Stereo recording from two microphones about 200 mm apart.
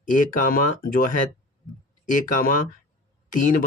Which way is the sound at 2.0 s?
45° left (ahead or behind).